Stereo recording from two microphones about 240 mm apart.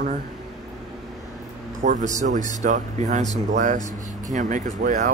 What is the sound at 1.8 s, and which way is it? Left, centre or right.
Speech, right.